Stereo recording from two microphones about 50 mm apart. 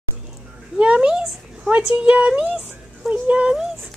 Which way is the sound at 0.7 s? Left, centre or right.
Right.